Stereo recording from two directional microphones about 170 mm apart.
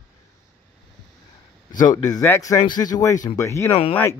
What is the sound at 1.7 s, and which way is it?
Speech, 20° left (ahead or behind).